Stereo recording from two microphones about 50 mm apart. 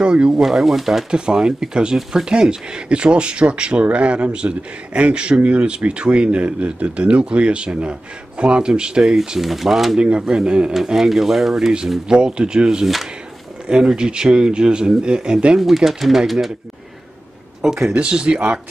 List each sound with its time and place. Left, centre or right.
0.0 s speech: right
0.4 s speech: centre
1.1 s speech: centre
9.9 s speech: right
10.7 s speech: centre
12.8 s speech: centre
13.7 s speech: centre
15.6 s speech: centre
17.6 s speech: centre